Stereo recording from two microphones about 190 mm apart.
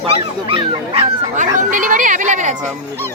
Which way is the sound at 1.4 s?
45° right (ahead or behind).